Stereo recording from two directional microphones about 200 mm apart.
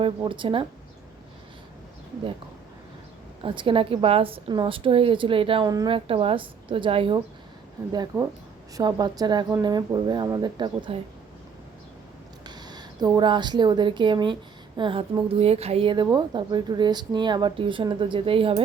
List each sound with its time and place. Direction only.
0.2 s a woman's voice: 25° right (ahead or behind)
3.4 s a woman's voice: 25° right (ahead or behind)
7.9 s a woman's voice: 10° right (ahead or behind)
12.5 s a woman's voice: 20° right (ahead or behind)